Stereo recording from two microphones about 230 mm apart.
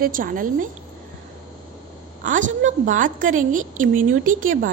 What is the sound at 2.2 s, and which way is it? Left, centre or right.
A woman's voice, right.